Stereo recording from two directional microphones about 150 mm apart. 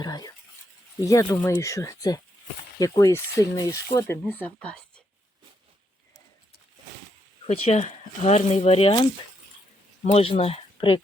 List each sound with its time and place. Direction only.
0.0 s speech: 25° left (ahead or behind); by 5.0 s 5° left (ahead or behind)
7.4 s speech: 45° left (ahead or behind)
10.1 s speech: 40° left (ahead or behind)